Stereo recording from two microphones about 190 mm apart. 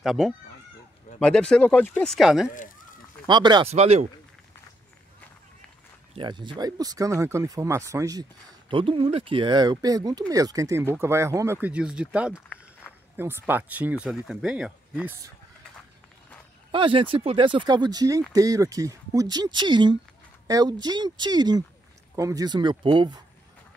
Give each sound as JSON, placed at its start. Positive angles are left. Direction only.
{"t": 0.0, "sound": "speech", "side_deg": 0}
{"t": 3.3, "sound": "speech", "side_deg": -25}
{"t": 3.7, "sound": "speech", "side_deg": -35}
{"t": 6.1, "sound": "speech", "side_deg": -25}
{"t": 16.7, "sound": "speech", "side_deg": -25}